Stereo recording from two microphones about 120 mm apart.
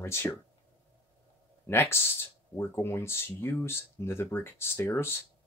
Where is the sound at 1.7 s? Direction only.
20° left (ahead or behind).